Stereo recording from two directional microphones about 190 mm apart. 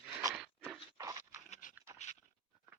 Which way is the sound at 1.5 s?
45° left (ahead or behind).